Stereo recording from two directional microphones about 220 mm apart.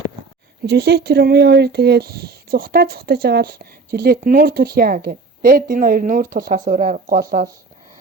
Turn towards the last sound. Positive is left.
turn(degrees=-35)  # may be behind; listen again after turning